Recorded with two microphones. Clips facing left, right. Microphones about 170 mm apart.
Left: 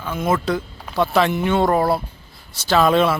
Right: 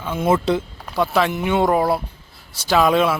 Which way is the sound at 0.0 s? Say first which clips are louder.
Right 2 dB; 25° right (ahead or behind).